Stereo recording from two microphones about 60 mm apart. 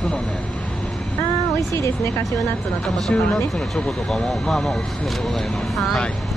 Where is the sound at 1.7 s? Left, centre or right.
Left.